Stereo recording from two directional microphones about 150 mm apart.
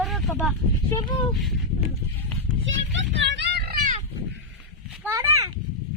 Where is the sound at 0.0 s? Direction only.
Centre (ahead or behind).